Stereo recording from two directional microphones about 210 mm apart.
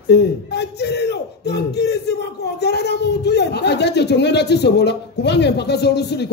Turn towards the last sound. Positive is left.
turn(degrees=50)  # may be behind; listen again after turning